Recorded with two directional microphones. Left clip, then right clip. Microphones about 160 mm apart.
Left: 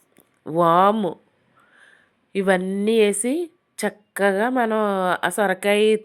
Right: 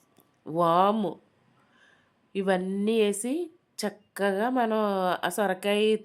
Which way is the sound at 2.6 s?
15° left (ahead or behind).